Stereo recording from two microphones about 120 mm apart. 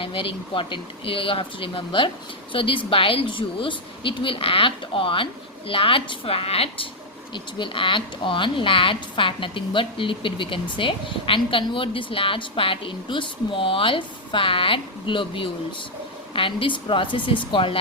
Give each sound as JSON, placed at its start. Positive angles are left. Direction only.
{"t": 0.0, "sound": "speech", "side_deg": 45}
{"t": 7.3, "sound": "speech", "side_deg": 45}